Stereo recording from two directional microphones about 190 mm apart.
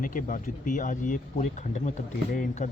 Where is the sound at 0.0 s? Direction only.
45° left (ahead or behind).